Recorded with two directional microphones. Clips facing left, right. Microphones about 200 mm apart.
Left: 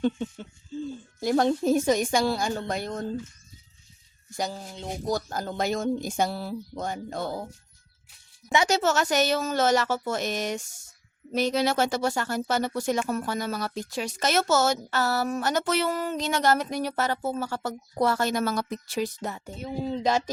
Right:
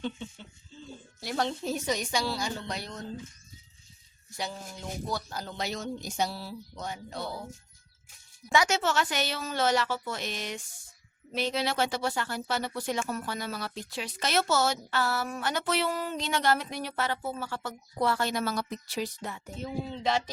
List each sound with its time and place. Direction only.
0.0 s a sound: 45° left (ahead or behind)
1.2 s speech: 45° left (ahead or behind)
4.4 s a sound: 40° left (ahead or behind)
5.0 s speech: 45° left (ahead or behind)
8.6 s speech: 40° left (ahead or behind)
19.5 s speech: 35° left (ahead or behind)